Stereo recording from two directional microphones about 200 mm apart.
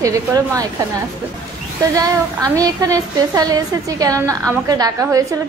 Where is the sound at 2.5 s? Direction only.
15° right (ahead or behind).